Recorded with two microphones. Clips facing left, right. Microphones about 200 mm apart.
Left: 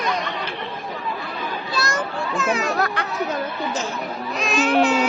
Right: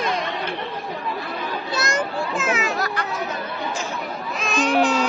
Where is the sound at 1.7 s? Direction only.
20° right (ahead or behind).